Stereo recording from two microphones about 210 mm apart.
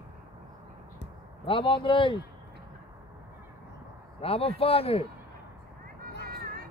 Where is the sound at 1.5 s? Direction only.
25° left (ahead or behind).